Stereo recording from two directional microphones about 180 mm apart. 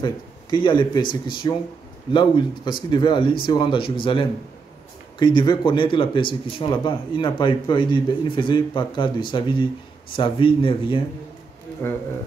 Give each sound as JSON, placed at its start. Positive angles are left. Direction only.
{"t": 0.0, "sound": "speech", "side_deg": 25}